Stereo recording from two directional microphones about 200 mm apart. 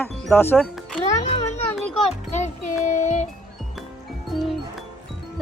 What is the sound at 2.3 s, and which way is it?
Child singing, 35° left (ahead or behind).